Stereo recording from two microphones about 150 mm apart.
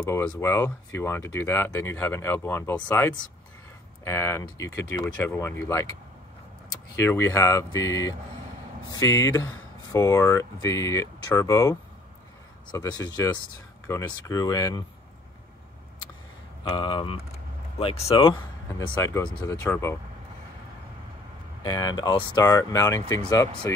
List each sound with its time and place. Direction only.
0.0 s speech: 20° left (ahead or behind)
7.0 s speech: 20° left (ahead or behind)
12.7 s speech: 25° left (ahead or behind)
16.6 s speech: 30° left (ahead or behind)
18.8 s speech: 20° left (ahead or behind)
21.6 s speech: 30° left (ahead or behind)